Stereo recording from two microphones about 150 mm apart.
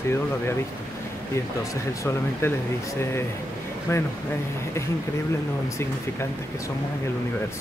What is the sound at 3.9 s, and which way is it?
Speech, 15° left (ahead or behind).